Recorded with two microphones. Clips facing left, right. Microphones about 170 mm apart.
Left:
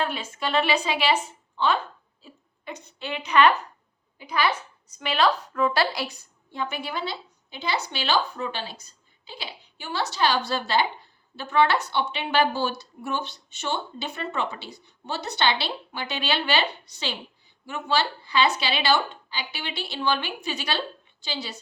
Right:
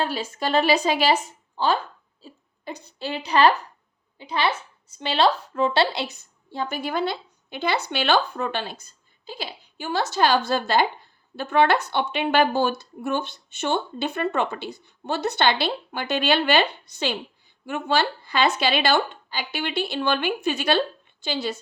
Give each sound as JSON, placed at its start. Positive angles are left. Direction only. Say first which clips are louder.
{"t": 0.0, "sound": "a woman's voice", "louder": "right 2 dB", "side_deg": -35}